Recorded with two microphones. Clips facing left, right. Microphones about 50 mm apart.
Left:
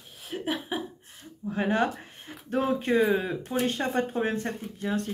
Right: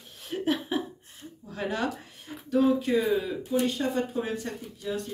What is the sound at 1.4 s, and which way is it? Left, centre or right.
Speech, left.